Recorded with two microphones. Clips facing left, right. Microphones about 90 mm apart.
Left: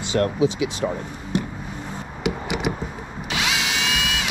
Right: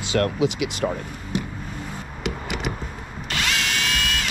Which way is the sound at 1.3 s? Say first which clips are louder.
Left 2 dB; centre (ahead or behind).